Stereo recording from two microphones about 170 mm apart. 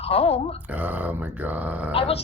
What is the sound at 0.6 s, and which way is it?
Speech, 10° right (ahead or behind).